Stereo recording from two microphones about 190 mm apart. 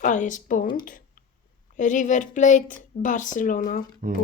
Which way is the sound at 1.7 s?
40° left (ahead or behind).